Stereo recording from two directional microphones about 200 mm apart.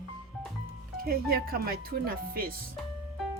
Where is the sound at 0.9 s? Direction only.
50° right (ahead or behind).